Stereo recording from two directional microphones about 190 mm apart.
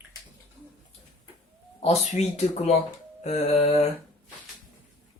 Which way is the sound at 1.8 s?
35° left (ahead or behind).